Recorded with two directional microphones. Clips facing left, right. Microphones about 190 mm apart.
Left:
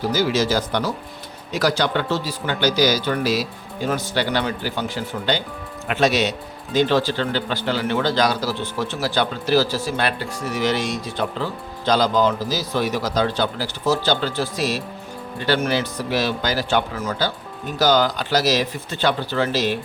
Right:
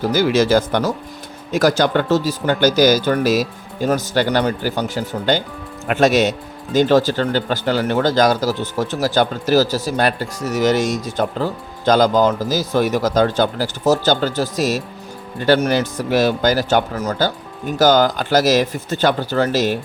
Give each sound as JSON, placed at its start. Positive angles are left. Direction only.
{"t": 0.1, "sound": "speech", "side_deg": -55}